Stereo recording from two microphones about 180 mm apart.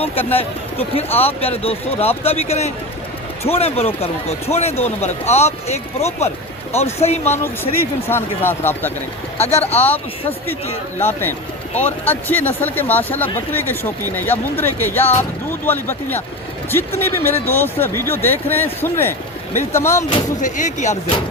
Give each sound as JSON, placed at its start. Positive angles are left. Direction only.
{"t": 0.0, "sound": "speech", "side_deg": 35}
{"t": 7.3, "sound": "speech", "side_deg": 15}
{"t": 9.4, "sound": "speech", "side_deg": 35}
{"t": 9.7, "sound": "speech", "side_deg": 10}
{"t": 11.0, "sound": "speech", "side_deg": 10}
{"t": 20.4, "sound": "speech", "side_deg": 45}